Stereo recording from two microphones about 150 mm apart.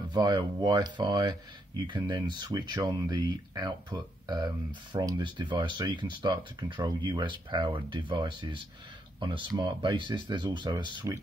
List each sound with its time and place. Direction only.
0.1 s speech: 30° right (ahead or behind)